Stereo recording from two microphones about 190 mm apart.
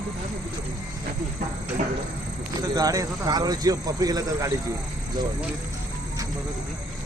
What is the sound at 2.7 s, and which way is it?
Speech, 20° right (ahead or behind).